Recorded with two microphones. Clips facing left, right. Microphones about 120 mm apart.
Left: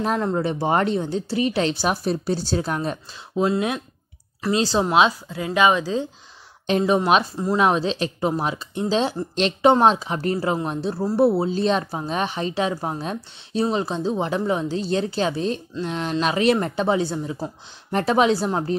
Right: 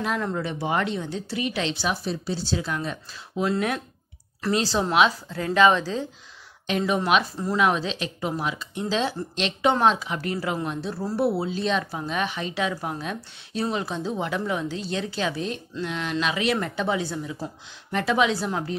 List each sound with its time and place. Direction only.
0.0 s speech: 35° left (ahead or behind)
3.4 s a woman's voice: 20° left (ahead or behind)
6.9 s speech: 35° left (ahead or behind)
17.9 s speech: 40° left (ahead or behind)